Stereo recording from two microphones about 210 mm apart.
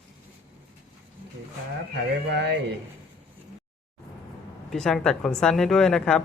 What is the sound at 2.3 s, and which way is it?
Speech, 55° right (ahead or behind).